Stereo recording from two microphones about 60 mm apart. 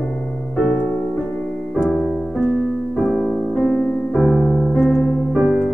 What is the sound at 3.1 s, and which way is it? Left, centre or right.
Music, centre.